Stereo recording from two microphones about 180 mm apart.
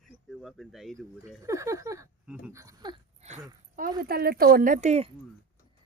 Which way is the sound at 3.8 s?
55° right (ahead or behind).